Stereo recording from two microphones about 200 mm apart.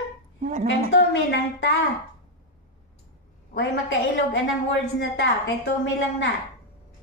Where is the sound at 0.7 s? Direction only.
60° left (ahead or behind).